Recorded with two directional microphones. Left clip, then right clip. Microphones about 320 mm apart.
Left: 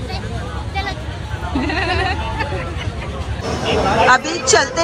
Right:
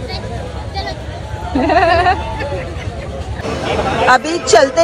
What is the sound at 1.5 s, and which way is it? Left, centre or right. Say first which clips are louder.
Speech: right 9 dB; centre.